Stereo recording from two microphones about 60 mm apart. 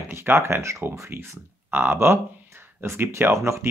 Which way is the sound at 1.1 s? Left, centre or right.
Right.